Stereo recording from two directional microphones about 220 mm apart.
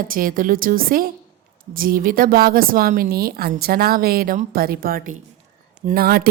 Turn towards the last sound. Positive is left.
turn(degrees=-45)  # may be behind; listen again after turning